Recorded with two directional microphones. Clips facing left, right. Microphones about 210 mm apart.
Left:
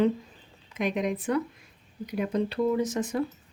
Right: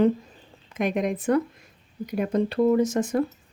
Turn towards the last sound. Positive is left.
turn(degrees=-45)  # may be behind; listen again after turning